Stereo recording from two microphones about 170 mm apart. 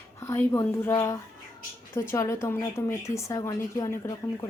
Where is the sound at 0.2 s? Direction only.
15° left (ahead or behind).